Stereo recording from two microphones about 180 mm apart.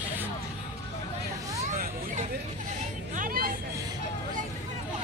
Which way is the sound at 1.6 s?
45° right (ahead or behind).